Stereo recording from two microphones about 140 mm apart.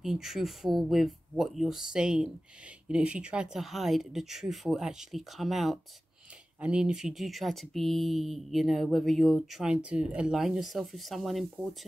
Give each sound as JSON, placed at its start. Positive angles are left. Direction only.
{"t": 0.0, "sound": "speech", "side_deg": -5}